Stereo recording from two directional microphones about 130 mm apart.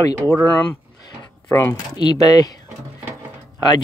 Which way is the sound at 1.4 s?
20° left (ahead or behind).